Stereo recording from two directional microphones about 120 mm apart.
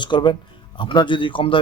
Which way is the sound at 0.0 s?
40° left (ahead or behind).